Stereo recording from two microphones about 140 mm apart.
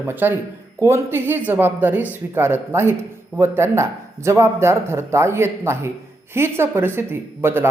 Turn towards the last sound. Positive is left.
turn(degrees=-15)  # may be behind; listen again after turning